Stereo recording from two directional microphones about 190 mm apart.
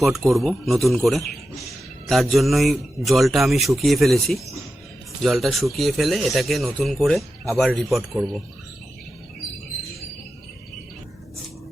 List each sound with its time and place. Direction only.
0.0 s speech: centre (ahead or behind)